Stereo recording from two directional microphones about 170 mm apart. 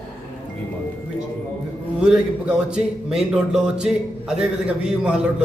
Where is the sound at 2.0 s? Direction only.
5° right (ahead or behind).